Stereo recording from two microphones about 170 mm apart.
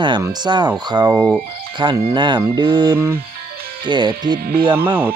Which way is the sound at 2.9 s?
15° right (ahead or behind).